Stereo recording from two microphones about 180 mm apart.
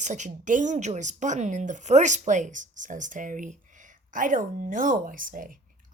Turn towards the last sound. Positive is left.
turn(degrees=-50)  # may be behind; listen again after turning